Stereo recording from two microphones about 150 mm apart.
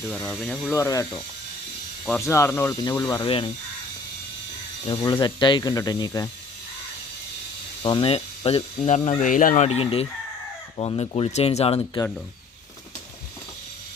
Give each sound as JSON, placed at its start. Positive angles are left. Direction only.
{"t": 0.1, "sound": "speech", "side_deg": 0}
{"t": 0.7, "sound": "speech", "side_deg": 20}
{"t": 2.0, "sound": "speech", "side_deg": 15}
{"t": 3.2, "sound": "speech", "side_deg": 35}
{"t": 4.9, "sound": "speech", "side_deg": 30}
{"t": 7.8, "sound": "speech", "side_deg": 35}
{"t": 9.6, "sound": "speech", "side_deg": 45}